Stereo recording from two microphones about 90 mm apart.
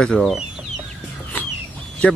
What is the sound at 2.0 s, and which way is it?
Speech, 15° left (ahead or behind).